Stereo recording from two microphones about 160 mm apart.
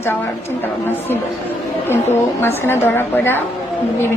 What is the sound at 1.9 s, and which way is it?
A woman's voice, 15° left (ahead or behind).